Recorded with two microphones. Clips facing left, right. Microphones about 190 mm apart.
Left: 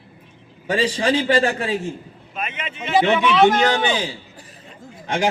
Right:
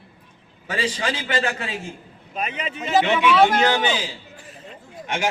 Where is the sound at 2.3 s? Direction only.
35° right (ahead or behind).